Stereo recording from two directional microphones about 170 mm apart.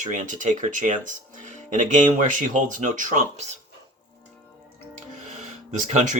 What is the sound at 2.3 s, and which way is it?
Speech, 50° right (ahead or behind).